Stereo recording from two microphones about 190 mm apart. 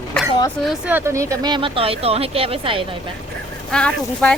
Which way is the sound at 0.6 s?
5° right (ahead or behind).